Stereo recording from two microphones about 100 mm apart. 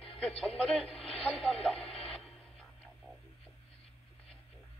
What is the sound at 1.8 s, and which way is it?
Radio, 75° left (ahead or behind).